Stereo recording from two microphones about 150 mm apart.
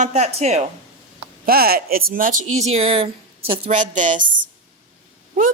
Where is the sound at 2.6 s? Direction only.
40° right (ahead or behind).